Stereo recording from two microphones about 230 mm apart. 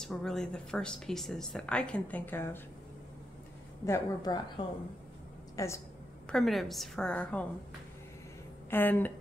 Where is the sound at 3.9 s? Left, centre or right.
Centre.